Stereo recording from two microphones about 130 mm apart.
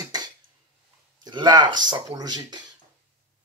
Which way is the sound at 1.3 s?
35° right (ahead or behind).